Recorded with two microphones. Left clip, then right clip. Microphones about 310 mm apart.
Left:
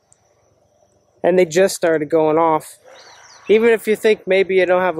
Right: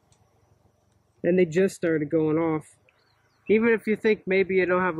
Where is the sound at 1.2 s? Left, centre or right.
Left.